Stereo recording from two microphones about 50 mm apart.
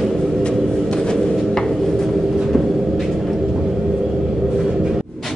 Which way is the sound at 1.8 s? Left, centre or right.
Centre.